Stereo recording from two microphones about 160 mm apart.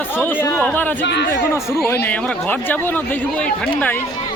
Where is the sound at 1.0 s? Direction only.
90° left.